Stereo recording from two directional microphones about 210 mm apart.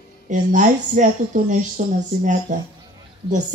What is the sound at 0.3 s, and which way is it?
A woman's voice, 35° right (ahead or behind).